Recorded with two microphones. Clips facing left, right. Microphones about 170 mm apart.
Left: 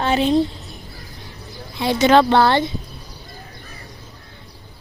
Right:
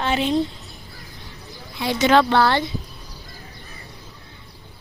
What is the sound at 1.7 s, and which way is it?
Speech, 30° left (ahead or behind).